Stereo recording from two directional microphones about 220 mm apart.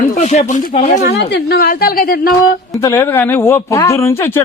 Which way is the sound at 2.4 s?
15° left (ahead or behind).